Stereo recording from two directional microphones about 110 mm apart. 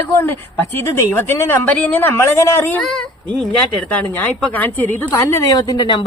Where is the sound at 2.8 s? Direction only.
5° left (ahead or behind).